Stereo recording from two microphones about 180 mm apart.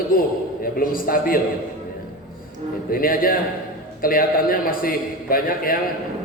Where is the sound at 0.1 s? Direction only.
55° left (ahead or behind).